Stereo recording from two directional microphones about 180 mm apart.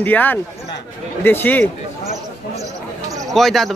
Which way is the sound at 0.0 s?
10° left (ahead or behind).